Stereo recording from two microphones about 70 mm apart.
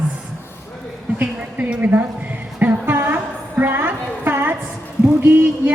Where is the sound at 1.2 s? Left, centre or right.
Right.